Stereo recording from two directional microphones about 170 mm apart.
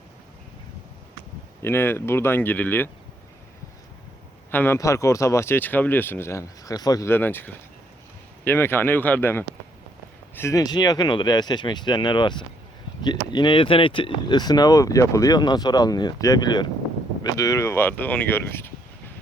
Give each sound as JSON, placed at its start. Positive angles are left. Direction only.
{"t": 1.6, "sound": "speech", "side_deg": 15}
{"t": 4.5, "sound": "speech", "side_deg": 15}